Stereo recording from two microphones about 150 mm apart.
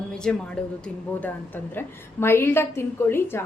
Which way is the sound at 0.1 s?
5° left (ahead or behind).